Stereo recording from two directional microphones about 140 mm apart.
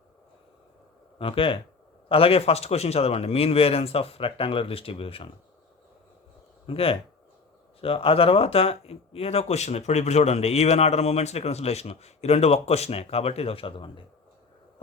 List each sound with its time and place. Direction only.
1.2 s speech: 40° left (ahead or behind)
6.7 s speech: 40° left (ahead or behind)